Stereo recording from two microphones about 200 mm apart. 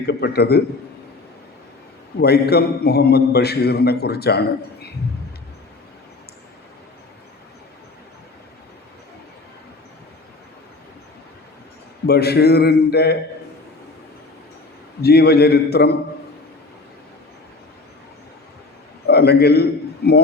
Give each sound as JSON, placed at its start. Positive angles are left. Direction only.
{"t": 0.0, "sound": "a man's voice", "side_deg": 55}
{"t": 2.2, "sound": "a man's voice", "side_deg": 55}
{"t": 12.0, "sound": "a man's voice", "side_deg": 55}
{"t": 15.0, "sound": "a man's voice", "side_deg": 55}
{"t": 19.0, "sound": "a man's voice", "side_deg": 55}